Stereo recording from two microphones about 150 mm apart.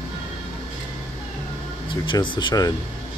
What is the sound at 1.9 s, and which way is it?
Speech, 30° left (ahead or behind).